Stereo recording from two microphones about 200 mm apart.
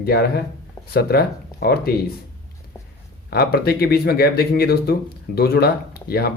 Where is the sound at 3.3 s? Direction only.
50° left (ahead or behind).